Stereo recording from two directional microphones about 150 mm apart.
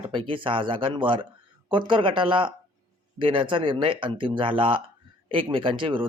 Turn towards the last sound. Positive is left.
turn(degrees=-35)  # may be behind; listen again after turning